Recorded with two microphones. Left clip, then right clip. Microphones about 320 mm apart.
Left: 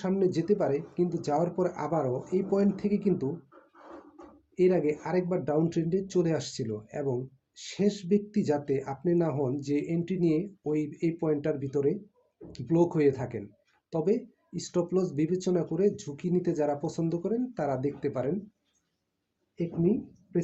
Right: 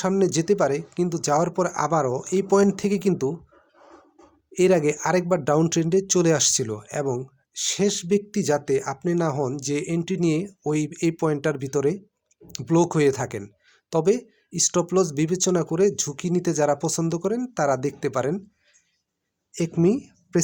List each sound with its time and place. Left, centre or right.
0.0 s speech: right
4.5 s speech: right